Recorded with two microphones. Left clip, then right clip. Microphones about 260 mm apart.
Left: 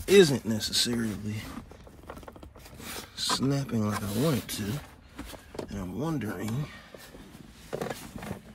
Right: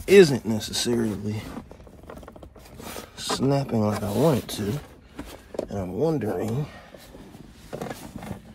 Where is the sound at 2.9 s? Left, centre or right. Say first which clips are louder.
Even; centre.